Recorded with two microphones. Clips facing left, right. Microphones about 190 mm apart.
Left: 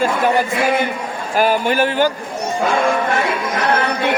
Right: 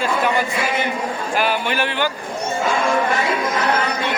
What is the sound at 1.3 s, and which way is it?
Speech, 45° left (ahead or behind).